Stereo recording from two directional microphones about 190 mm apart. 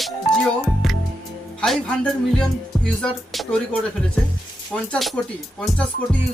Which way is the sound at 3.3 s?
Centre (ahead or behind).